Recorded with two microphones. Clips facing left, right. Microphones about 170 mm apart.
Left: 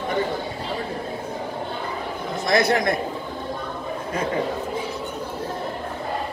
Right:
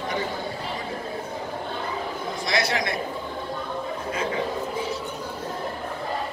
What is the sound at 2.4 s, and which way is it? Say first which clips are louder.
Speech: left 7 dB; 55° left (ahead or behind).